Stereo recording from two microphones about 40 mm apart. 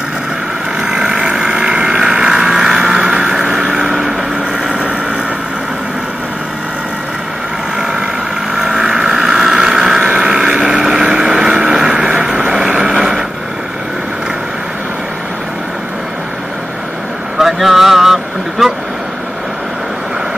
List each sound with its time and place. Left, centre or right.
0.7 s vehicle: centre
4.6 s vehicle: right
8.5 s vehicle: centre
17.4 s vehicle: centre